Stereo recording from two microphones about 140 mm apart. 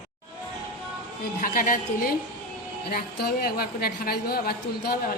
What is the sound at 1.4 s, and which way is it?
A woman's voice, 80° left.